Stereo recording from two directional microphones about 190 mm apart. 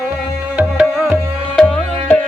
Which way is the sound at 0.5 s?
5° right (ahead or behind).